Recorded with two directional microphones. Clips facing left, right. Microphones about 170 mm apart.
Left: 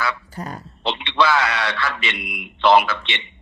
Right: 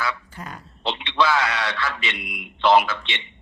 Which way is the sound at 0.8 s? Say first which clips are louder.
Left 2 dB; 70° left (ahead or behind).